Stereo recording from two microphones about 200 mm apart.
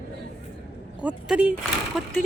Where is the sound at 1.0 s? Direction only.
5° right (ahead or behind).